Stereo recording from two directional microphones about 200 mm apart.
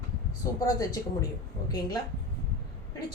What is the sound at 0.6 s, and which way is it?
Speech, 15° left (ahead or behind).